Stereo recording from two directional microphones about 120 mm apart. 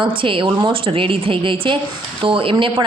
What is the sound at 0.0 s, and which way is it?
A woman's voice, 45° right (ahead or behind).